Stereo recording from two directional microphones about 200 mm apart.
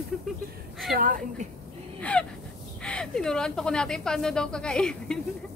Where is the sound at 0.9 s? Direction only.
45° right (ahead or behind).